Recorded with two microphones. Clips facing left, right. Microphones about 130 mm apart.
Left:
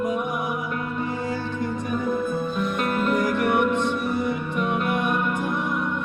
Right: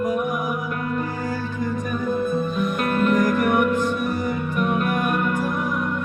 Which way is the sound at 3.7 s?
25° left (ahead or behind).